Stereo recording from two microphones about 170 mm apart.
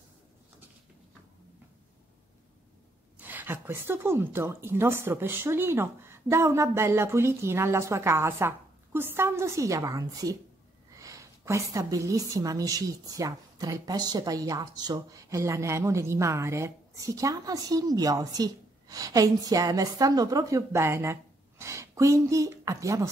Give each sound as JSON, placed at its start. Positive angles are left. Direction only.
{"t": 3.2, "sound": "a woman's voice", "side_deg": -10}